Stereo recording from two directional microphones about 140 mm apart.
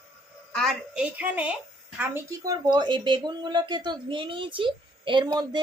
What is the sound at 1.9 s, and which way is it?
Speech, 20° right (ahead or behind).